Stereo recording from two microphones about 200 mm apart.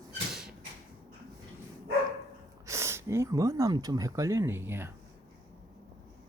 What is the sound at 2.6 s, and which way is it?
Speech, 15° right (ahead or behind).